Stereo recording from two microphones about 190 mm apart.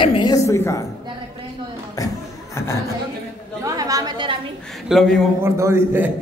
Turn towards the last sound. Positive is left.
turn(degrees=-10)  # may be behind; listen again after turning